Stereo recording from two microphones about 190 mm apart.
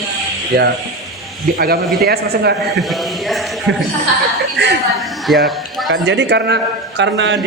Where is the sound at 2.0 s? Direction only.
55° right (ahead or behind).